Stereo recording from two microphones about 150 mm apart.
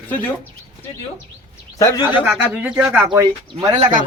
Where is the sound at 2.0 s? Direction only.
10° right (ahead or behind).